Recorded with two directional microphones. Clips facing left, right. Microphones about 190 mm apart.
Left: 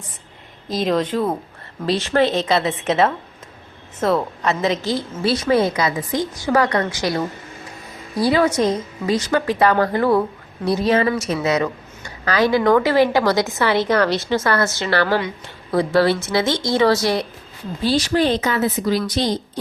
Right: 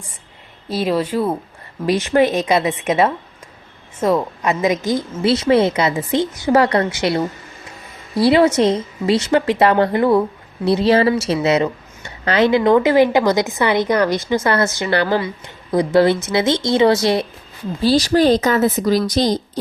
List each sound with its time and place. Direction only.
0.7 s a woman's voice: 5° right (ahead or behind); by 7.2 s 25° right (ahead or behind)
8.2 s a woman's voice: 25° right (ahead or behind)
17.8 s a woman's voice: 35° right (ahead or behind)